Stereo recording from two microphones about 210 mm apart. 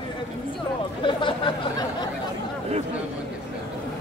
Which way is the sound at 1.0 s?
25° left (ahead or behind).